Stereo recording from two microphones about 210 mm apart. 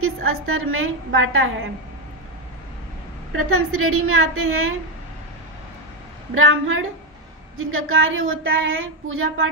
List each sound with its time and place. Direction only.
0.0 s speech: 85° right; by 1.5 s 70° right (ahead or behind)
3.4 s a woman's voice: 90° right
6.3 s speech: 75° right (ahead or behind)